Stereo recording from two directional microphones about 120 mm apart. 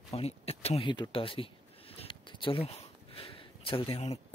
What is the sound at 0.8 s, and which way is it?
Speech, 40° left (ahead or behind).